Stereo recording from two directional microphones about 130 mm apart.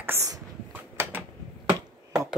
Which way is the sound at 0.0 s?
15° right (ahead or behind).